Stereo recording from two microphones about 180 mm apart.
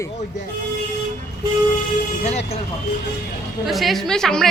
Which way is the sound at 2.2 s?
35° left (ahead or behind).